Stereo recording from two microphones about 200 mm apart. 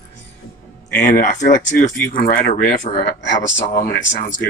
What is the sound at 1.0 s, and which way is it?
Speech, 40° left (ahead or behind).